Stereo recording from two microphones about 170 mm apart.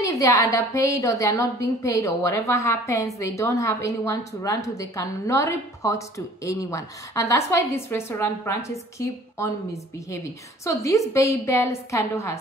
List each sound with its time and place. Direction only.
0.0 s a woman's voice: 20° left (ahead or behind)